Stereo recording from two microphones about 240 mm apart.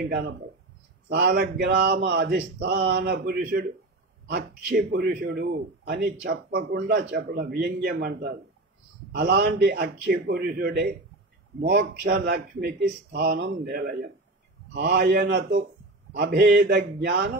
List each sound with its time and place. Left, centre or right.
0.1 s a man's voice: right